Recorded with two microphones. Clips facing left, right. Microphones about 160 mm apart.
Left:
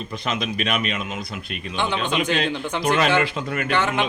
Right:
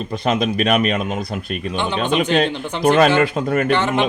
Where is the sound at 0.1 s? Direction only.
45° right (ahead or behind).